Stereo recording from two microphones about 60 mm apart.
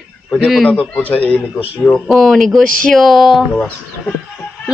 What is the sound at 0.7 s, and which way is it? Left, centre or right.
Speech, left.